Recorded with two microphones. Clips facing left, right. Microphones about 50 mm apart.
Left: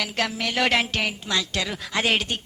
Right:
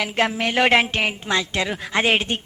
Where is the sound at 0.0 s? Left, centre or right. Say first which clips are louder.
Right 5 dB; right.